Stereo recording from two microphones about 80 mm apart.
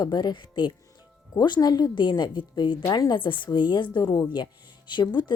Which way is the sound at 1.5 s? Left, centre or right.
Left.